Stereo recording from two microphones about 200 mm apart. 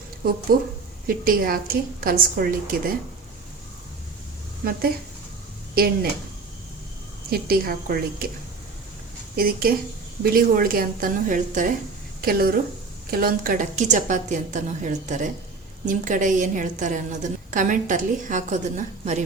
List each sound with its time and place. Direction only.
0.5 s a woman's voice: 45° right (ahead or behind)
5.7 s a woman's voice: 50° right (ahead or behind)
7.3 s a woman's voice: 50° right (ahead or behind)
9.3 s a woman's voice: 45° right (ahead or behind)